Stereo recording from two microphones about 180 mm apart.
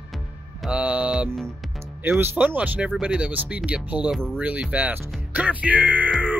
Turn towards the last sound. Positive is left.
turn(degrees=-10)  # may be behind; listen again after turning